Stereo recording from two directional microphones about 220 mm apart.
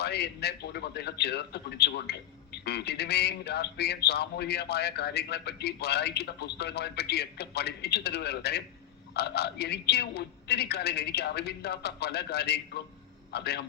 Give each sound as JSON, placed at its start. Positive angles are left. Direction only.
{"t": 0.0, "sound": "a man's voice", "side_deg": 45}